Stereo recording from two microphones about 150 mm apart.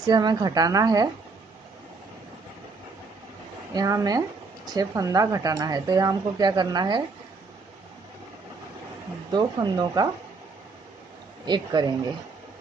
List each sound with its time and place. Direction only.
0.0 s speech: 25° right (ahead or behind)
3.7 s speech: 25° right (ahead or behind)
9.3 s speech: 30° right (ahead or behind)
11.4 s speech: 30° right (ahead or behind)